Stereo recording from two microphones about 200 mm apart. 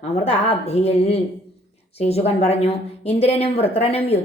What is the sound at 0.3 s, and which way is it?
A woman's voice, 30° left (ahead or behind).